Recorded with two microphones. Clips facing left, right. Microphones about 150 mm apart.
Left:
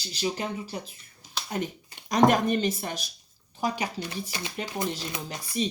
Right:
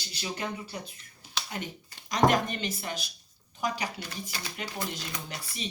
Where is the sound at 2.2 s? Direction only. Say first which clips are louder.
Left 3 dB; 45° left (ahead or behind).